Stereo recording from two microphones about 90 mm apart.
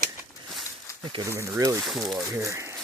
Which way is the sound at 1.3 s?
35° right (ahead or behind).